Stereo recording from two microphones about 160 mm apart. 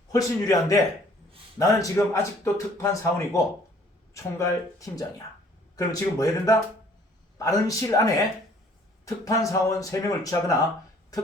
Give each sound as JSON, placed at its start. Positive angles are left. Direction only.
{"t": 0.1, "sound": "speech", "side_deg": 20}